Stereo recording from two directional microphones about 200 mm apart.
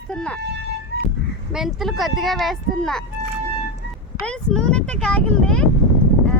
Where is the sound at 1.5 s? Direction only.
Centre (ahead or behind).